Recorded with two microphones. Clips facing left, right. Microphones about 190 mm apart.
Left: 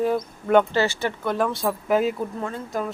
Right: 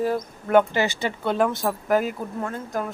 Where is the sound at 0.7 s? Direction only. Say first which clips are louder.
Left 1 dB; 15° right (ahead or behind).